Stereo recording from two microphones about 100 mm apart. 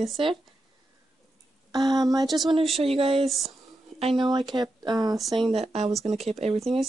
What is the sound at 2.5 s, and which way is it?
Speech, 70° right (ahead or behind).